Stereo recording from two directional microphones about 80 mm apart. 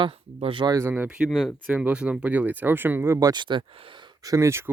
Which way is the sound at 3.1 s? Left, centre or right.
Right.